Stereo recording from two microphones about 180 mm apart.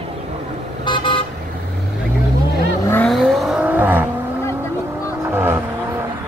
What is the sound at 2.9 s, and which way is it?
Vehicle, 5° left (ahead or behind).